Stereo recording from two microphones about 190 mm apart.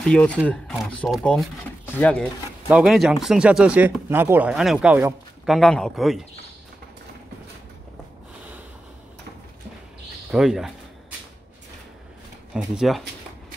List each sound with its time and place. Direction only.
0.0 s speech: 5° left (ahead or behind)
10.3 s a sound: centre (ahead or behind)
12.5 s speech: centre (ahead or behind)